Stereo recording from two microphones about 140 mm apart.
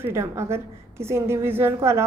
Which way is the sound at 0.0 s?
20° right (ahead or behind).